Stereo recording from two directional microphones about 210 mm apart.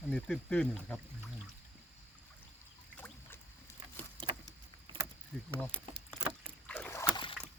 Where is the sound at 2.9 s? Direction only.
10° left (ahead or behind).